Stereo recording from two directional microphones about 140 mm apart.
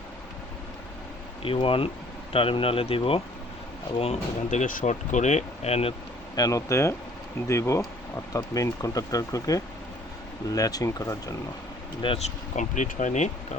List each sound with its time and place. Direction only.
1.4 s speech: 40° left (ahead or behind)
4.6 s speech: 70° left (ahead or behind); by 5.9 s 45° left (ahead or behind)
6.3 s speech: 25° left (ahead or behind)
12.0 s speech: 45° left (ahead or behind)
12.5 s speech: 60° left (ahead or behind)